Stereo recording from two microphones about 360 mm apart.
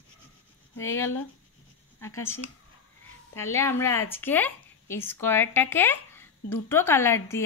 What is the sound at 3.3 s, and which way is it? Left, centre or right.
A woman's voice, centre.